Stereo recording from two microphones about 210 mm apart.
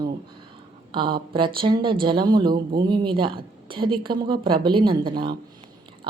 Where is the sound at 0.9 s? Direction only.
25° right (ahead or behind).